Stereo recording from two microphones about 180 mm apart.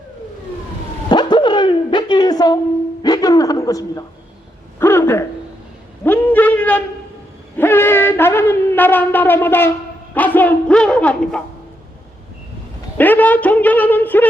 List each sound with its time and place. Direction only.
1.1 s a sound: 25° left (ahead or behind)
7.5 s shofar: 10° left (ahead or behind)
10.2 s speech: 10° left (ahead or behind)
13.0 s a woman's voice: 10° left (ahead or behind)